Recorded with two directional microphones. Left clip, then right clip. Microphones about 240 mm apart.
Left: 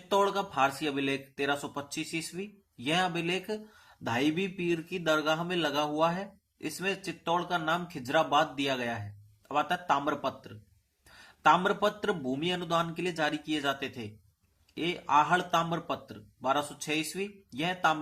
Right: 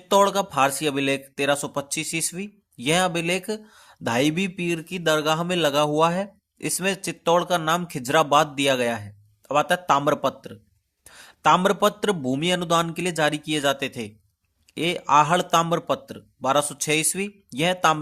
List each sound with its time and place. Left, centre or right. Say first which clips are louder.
0.1 s speech: right 9 dB; right